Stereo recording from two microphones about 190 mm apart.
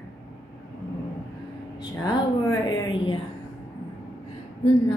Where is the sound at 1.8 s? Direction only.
20° left (ahead or behind).